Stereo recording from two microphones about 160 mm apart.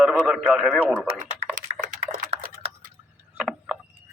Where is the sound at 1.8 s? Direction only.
55° right (ahead or behind).